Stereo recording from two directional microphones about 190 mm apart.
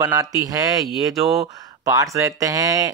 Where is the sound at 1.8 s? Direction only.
15° right (ahead or behind).